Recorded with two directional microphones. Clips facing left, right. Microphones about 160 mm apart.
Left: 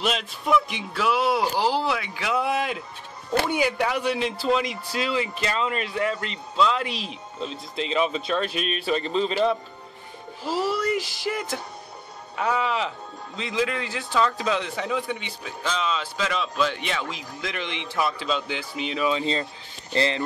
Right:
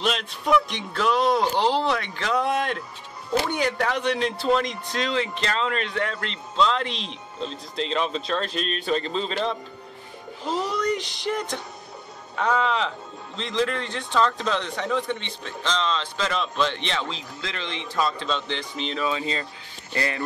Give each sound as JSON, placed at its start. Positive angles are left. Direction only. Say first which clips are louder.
{"t": 0.0, "sound": "speech", "louder": "right 1 dB", "side_deg": 0}